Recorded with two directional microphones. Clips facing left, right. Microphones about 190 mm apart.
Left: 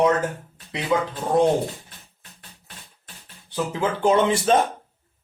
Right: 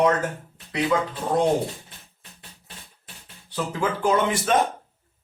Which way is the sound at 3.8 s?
25° left (ahead or behind).